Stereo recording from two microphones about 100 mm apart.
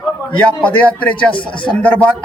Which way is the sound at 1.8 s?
15° left (ahead or behind).